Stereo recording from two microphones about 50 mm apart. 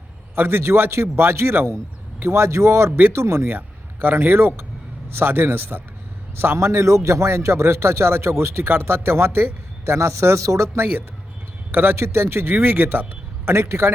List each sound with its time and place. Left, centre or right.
0.3 s a man's voice: right
6.6 s a man's voice: right
11.7 s a man's voice: right
11.9 s a man's voice: right
13.5 s a man's voice: right